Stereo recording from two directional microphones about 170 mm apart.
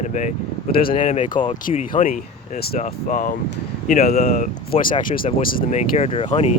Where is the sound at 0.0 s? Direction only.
45° left (ahead or behind).